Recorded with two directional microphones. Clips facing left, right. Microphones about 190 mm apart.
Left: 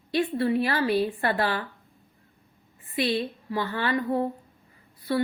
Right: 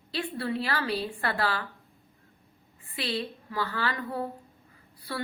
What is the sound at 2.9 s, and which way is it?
A woman's voice, 20° left (ahead or behind).